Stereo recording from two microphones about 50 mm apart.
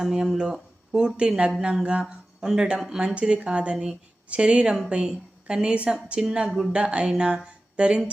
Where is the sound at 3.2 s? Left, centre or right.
Right.